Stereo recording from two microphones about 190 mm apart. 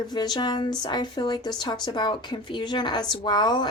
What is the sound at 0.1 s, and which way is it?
Speech, 20° left (ahead or behind).